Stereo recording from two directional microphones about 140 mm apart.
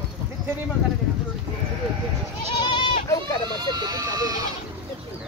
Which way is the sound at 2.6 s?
35° left (ahead or behind).